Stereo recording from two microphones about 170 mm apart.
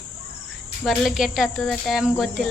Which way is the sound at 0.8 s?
Centre (ahead or behind).